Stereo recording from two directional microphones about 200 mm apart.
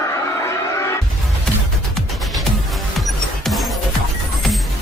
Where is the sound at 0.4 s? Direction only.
15° left (ahead or behind).